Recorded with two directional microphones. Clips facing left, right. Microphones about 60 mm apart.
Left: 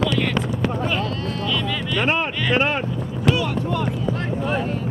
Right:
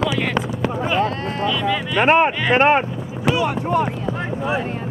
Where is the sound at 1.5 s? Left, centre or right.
Centre.